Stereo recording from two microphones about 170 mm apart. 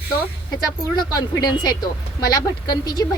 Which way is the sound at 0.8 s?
25° left (ahead or behind).